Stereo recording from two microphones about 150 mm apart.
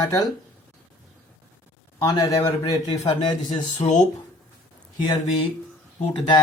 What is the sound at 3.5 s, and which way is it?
Speech, 50° left (ahead or behind).